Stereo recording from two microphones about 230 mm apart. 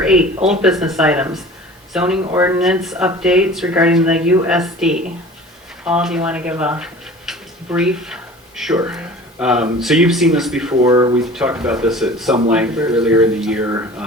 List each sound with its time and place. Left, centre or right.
0.0 s speech: centre
10.8 s speech: centre
11.3 s speech: centre